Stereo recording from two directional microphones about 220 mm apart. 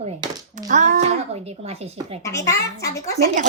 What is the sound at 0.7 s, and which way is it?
Speech, 35° right (ahead or behind).